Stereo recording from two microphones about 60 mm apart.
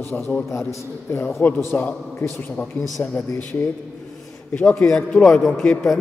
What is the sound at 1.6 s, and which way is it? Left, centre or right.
Mantra, left.